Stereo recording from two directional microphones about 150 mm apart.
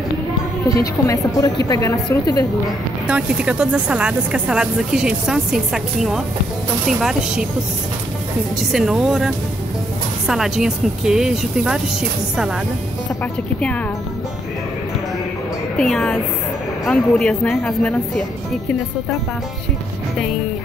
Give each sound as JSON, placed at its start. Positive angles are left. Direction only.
{"t": 1.0, "sound": "a woman's voice", "side_deg": 20}
{"t": 3.1, "sound": "speech", "side_deg": -5}
{"t": 8.5, "sound": "speech", "side_deg": 0}
{"t": 13.2, "sound": "speech", "side_deg": 10}
{"t": 15.8, "sound": "speech", "side_deg": 0}